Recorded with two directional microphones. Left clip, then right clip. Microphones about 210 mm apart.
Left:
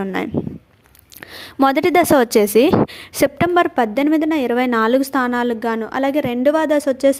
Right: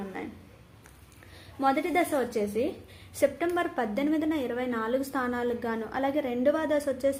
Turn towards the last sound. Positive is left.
turn(degrees=35)  # may be behind; listen again after turning